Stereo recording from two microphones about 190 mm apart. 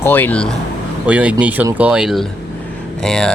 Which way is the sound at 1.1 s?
5° right (ahead or behind).